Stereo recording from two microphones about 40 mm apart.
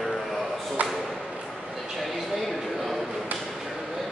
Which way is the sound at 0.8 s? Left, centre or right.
Right.